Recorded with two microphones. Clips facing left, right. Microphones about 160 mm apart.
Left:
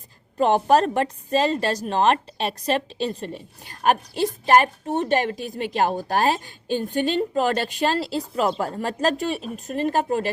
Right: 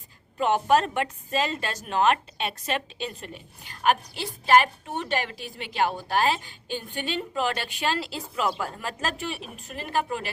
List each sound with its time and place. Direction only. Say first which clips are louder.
0.3 s a woman's voice: left 4 dB; 35° left (ahead or behind)